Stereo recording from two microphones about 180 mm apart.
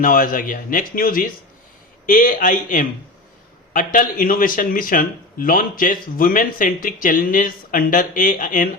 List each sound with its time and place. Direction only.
0.0 s a man's voice: 50° left (ahead or behind)